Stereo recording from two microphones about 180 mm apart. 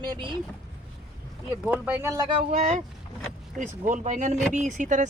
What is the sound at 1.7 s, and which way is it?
Speech, 10° right (ahead or behind).